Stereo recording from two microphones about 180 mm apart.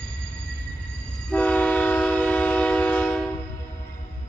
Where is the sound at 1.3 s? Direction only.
5° left (ahead or behind).